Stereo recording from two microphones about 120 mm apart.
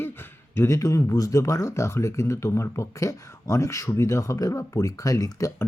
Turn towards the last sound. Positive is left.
turn(degrees=30)  # may be behind; listen again after turning